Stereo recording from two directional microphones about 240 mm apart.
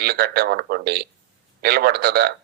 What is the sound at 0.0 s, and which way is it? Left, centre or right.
Speech, right.